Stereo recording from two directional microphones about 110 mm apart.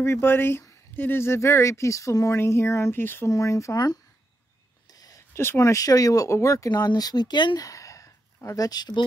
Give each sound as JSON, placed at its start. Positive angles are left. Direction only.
{"t": 0.0, "sound": "speech", "side_deg": 20}